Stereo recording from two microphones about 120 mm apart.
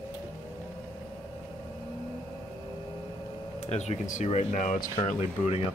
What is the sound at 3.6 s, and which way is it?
Speech, 70° left (ahead or behind).